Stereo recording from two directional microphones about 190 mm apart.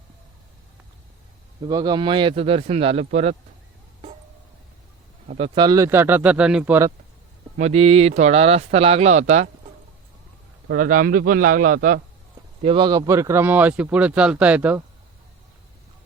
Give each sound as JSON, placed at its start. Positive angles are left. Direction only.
{"t": 1.6, "sound": "speech", "side_deg": -20}
{"t": 5.4, "sound": "speech", "side_deg": -20}
{"t": 7.6, "sound": "speech", "side_deg": -30}
{"t": 10.7, "sound": "a man's voice", "side_deg": -45}
{"t": 12.6, "sound": "speech", "side_deg": -25}